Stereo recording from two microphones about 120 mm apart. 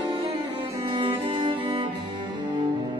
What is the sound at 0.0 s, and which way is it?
Music, 45° right (ahead or behind).